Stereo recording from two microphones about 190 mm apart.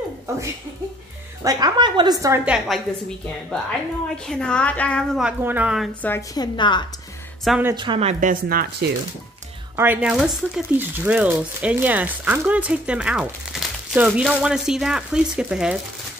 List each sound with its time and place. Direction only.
1.4 s a woman's voice: 20° right (ahead or behind)
2.4 s speech: 5° right (ahead or behind)
4.1 s speech: 5° left (ahead or behind)
5.4 s a woman's voice: 10° right (ahead or behind)
6.0 s a woman's voice: 15° left (ahead or behind)
7.4 s speech: 5° right (ahead or behind)
7.7 s speech: 25° right (ahead or behind); by 8.9 s 50° right (ahead or behind)
9.8 s speech: 5° right (ahead or behind)